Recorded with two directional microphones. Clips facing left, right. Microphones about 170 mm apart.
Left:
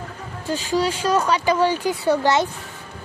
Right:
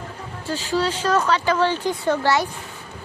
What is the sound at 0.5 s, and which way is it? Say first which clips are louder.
Speech: left 1 dB; 15° left (ahead or behind).